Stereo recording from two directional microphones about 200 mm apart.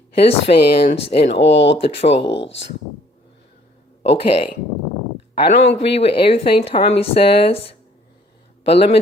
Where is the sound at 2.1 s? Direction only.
60° left (ahead or behind).